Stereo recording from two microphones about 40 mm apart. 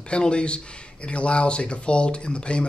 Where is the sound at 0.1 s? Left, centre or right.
Left.